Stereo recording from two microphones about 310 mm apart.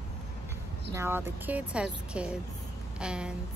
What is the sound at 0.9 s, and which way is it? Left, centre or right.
Speech, centre.